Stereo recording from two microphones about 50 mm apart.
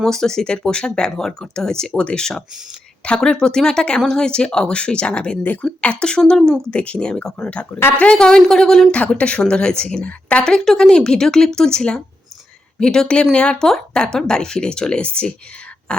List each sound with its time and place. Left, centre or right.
0.0 s speech: centre
9.1 s speech: left
10.4 s speech: centre
15.9 s a sound: left